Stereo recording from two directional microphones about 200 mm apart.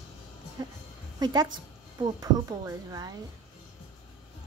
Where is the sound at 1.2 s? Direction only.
20° right (ahead or behind).